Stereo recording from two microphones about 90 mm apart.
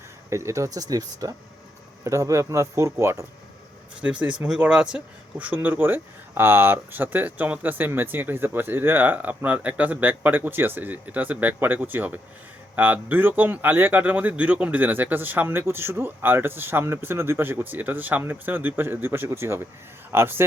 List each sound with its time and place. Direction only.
0.3 s speech: 35° right (ahead or behind)
4.0 s a man's voice: 15° right (ahead or behind)